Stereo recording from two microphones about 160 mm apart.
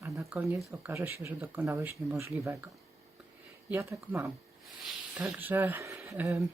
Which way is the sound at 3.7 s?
15° right (ahead or behind).